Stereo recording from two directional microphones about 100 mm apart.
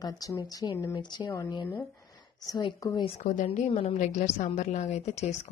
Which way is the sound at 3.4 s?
90° left.